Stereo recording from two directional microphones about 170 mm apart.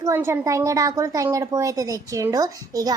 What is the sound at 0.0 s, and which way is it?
A woman's voice, 15° right (ahead or behind).